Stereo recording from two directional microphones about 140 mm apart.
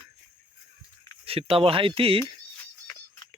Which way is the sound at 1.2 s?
40° right (ahead or behind).